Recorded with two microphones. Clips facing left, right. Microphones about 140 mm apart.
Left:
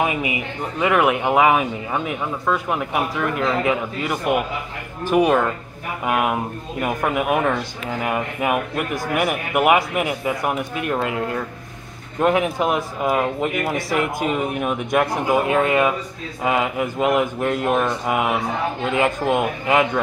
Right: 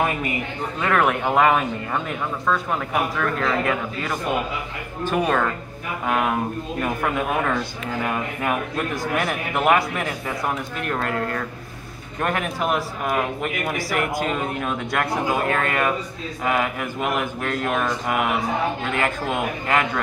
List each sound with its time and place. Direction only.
0.0 s speech: 10° left (ahead or behind)